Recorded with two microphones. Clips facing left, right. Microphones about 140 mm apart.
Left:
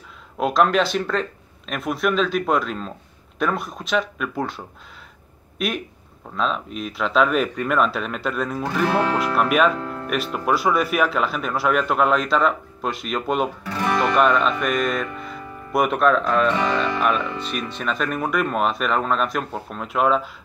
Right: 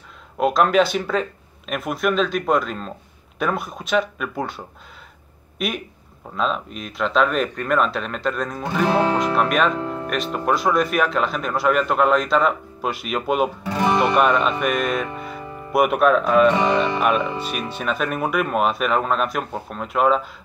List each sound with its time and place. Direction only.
0.4 s speech: centre (ahead or behind)
8.6 s speech: 20° right (ahead or behind)
9.2 s speech: 5° left (ahead or behind)
9.8 s music: 20° right (ahead or behind)
10.0 s speech: 5° left (ahead or behind)
13.7 s music: 20° right (ahead or behind)
14.1 s speech: 5° right (ahead or behind)
17.0 s speech: 10° right (ahead or behind)